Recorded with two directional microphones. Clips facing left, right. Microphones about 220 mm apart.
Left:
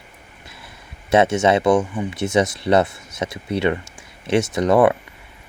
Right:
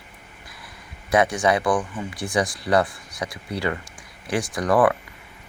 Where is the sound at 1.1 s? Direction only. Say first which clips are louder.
Left 4 dB; 25° left (ahead or behind).